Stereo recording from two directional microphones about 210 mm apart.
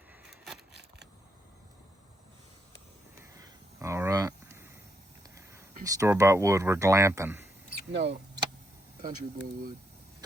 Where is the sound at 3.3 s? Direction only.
15° right (ahead or behind).